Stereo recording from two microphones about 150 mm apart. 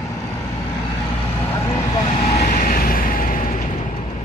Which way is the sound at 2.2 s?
45° left (ahead or behind).